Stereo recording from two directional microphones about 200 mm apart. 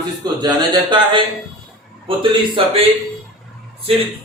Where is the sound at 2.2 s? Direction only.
25° right (ahead or behind).